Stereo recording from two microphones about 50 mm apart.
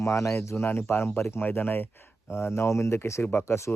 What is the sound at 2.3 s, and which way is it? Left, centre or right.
Speech, left.